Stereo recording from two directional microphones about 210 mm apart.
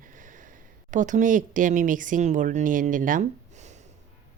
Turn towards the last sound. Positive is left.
turn(degrees=-35)  # may be behind; listen again after turning